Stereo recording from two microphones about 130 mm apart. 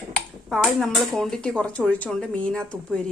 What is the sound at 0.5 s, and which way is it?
A woman's voice, centre (ahead or behind).